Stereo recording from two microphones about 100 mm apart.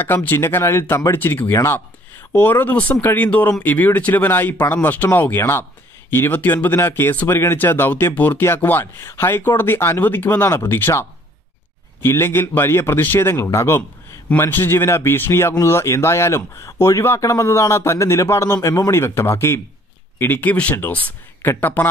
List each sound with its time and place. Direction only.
0.0 s speech: 20° left (ahead or behind)